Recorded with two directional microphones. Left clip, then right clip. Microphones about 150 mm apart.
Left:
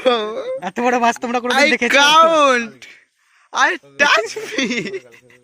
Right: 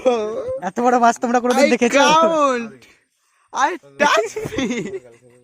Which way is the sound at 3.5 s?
10° right (ahead or behind).